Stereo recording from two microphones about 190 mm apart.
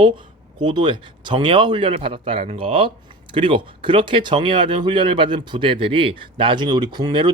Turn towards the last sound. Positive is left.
turn(degrees=-25)  # may be behind; listen again after turning